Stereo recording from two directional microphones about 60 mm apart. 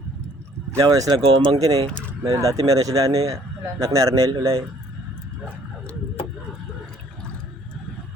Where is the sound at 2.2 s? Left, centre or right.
Right.